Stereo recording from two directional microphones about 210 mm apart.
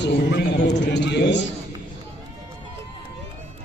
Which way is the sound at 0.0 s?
55° left (ahead or behind).